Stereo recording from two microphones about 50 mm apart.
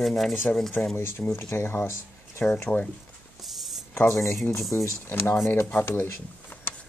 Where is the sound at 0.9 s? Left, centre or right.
Left.